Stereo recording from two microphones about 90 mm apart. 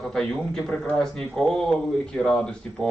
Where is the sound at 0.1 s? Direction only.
10° left (ahead or behind).